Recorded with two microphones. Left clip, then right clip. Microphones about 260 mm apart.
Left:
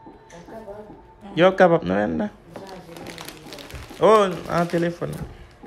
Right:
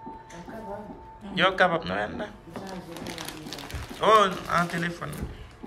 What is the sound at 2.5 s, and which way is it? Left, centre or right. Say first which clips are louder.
Music: left 1 dB; centre.